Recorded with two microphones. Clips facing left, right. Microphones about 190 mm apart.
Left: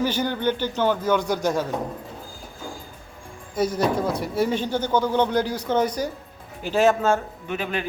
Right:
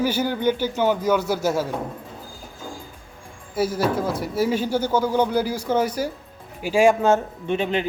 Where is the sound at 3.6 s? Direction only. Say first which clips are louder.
Even; 5° right (ahead or behind).